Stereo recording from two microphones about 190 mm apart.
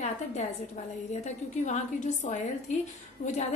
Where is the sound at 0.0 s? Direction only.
35° left (ahead or behind).